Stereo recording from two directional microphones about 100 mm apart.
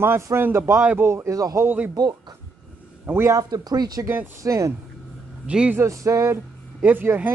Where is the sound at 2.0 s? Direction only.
45° right (ahead or behind).